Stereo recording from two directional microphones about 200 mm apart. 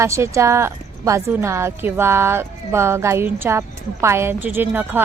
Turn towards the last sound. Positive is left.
turn(degrees=-10)  # may be behind; listen again after turning